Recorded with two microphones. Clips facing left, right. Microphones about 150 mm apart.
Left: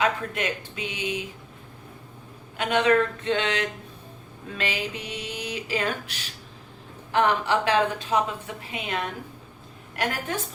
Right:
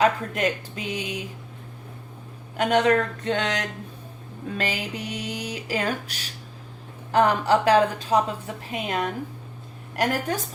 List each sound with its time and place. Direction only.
0.0 s speech: 40° right (ahead or behind)
2.6 s speech: 40° right (ahead or behind)